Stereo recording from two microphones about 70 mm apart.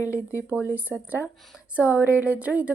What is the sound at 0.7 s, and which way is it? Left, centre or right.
Speech, right.